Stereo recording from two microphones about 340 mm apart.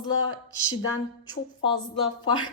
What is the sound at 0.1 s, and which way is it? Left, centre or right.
Speech, left.